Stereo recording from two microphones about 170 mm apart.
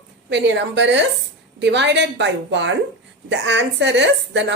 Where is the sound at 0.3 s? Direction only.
90° right.